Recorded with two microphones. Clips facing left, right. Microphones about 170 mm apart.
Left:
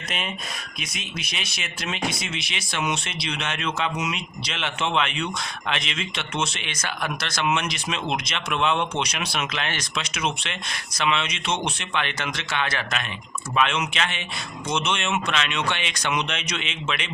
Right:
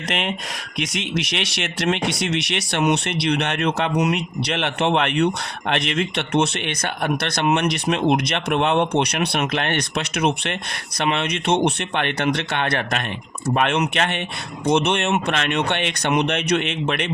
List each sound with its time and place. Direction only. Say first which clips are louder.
0.1 s speech: right 6 dB; 75° right (ahead or behind); by 17.1 s 60° right (ahead or behind)